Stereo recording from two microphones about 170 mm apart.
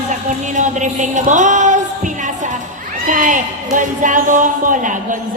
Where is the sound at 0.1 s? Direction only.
45° right (ahead or behind).